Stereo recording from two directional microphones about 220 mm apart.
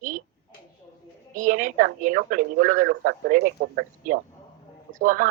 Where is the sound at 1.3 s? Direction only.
35° right (ahead or behind).